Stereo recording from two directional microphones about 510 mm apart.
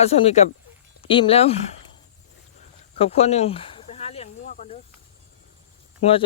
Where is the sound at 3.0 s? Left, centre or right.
Centre.